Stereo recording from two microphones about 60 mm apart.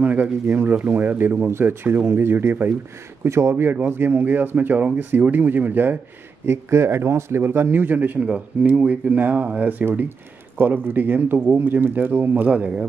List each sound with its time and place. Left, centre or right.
0.0 s speech: right
1.5 s a man's voice: right
3.3 s a man's voice: right
6.4 s a man's voice: right
12.4 s speech: centre